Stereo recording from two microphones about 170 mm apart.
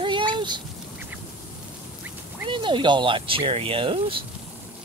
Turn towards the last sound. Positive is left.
turn(degrees=-30)  # may be behind; listen again after turning